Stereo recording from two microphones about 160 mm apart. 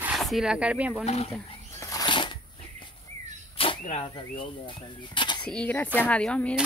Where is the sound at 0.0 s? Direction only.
Centre (ahead or behind).